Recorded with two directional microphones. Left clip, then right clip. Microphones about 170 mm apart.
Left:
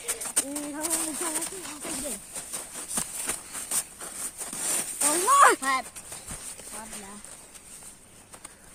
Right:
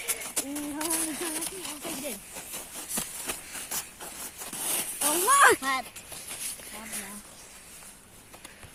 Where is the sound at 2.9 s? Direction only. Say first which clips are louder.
Left 2 dB; centre (ahead or behind).